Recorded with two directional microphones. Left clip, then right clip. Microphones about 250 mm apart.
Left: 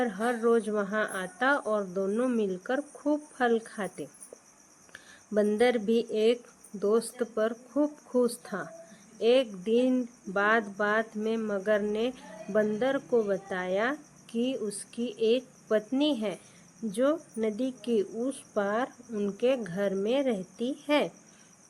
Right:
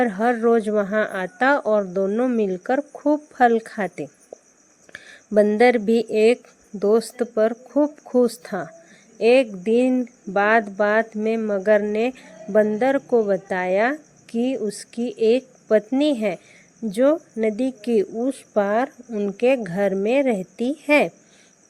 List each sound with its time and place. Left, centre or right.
0.0 s speech: right